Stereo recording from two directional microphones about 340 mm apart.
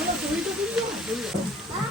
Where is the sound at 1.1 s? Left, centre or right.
Centre.